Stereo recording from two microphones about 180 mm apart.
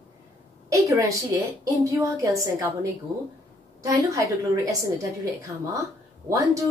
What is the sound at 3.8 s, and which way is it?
A woman's voice, 20° right (ahead or behind).